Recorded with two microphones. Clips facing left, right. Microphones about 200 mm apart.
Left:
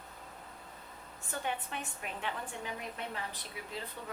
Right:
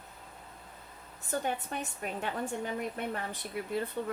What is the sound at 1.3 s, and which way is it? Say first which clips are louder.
A woman's voice: right 5 dB; 40° right (ahead or behind).